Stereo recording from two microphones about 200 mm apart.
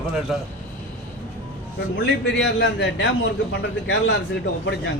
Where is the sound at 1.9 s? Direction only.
65° left (ahead or behind).